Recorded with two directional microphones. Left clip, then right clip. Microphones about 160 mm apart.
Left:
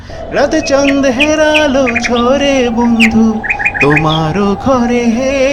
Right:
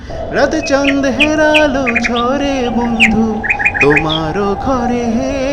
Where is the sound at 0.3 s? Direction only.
45° right (ahead or behind).